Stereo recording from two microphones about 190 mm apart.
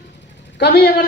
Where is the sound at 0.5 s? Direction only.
60° left (ahead or behind).